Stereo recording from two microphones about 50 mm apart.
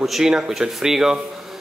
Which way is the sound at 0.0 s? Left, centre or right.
Centre.